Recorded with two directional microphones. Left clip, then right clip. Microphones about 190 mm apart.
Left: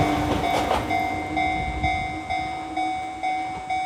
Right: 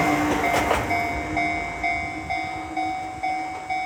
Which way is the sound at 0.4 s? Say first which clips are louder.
Right 1 dB; 15° left (ahead or behind).